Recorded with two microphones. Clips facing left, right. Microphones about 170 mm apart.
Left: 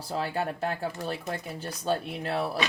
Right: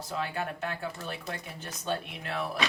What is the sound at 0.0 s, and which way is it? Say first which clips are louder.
Speech: left 4 dB; 35° left (ahead or behind).